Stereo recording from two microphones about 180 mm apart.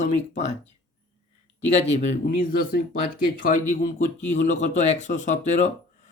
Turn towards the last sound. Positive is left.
turn(degrees=40)  # may be behind; listen again after turning